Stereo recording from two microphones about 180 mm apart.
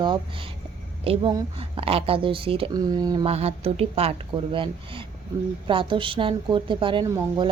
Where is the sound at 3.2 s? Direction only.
35° right (ahead or behind).